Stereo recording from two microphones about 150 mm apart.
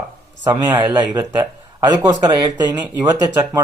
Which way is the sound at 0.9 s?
15° right (ahead or behind).